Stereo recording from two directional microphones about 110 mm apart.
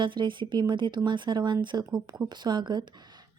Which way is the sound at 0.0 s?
45° right (ahead or behind).